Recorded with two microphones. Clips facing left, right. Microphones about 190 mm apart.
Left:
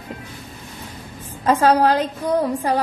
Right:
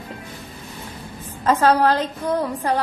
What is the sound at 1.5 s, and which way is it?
A woman's voice, 10° left (ahead or behind).